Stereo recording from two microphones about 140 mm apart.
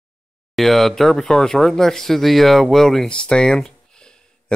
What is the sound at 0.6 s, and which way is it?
Speech, centre (ahead or behind).